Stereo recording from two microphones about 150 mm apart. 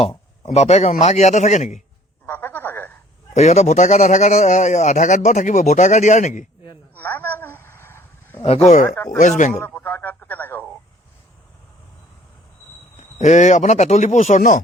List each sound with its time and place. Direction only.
0.4 s a man's voice: 50° left (ahead or behind)
2.2 s a sound: 15° left (ahead or behind)
3.3 s a man's voice: 50° left (ahead or behind)
6.9 s a sound: 15° left (ahead or behind)
8.4 s a man's voice: 45° left (ahead or behind)
9.5 s speech: 5° left (ahead or behind)
13.0 s a man's voice: 50° left (ahead or behind)